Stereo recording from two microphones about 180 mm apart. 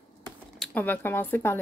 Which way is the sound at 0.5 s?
5° left (ahead or behind).